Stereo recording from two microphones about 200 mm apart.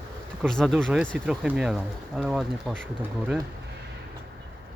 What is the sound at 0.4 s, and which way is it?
Speech, centre (ahead or behind).